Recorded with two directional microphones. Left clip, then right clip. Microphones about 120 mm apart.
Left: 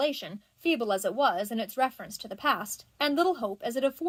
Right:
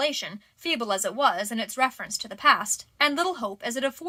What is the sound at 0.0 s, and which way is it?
A woman's voice, 35° left (ahead or behind).